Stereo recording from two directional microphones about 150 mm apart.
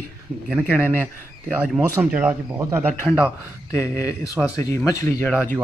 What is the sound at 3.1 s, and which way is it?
Speech, 5° right (ahead or behind).